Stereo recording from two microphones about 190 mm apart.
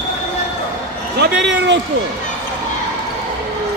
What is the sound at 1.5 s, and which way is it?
Speech, 70° right (ahead or behind).